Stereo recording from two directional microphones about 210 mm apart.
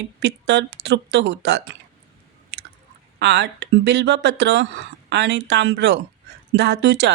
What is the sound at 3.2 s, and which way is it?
Speech, 55° right (ahead or behind).